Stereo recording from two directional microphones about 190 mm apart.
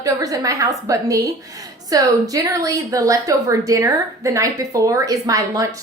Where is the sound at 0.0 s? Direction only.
20° right (ahead or behind).